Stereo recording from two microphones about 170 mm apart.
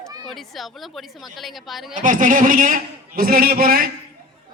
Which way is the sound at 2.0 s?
50° right (ahead or behind).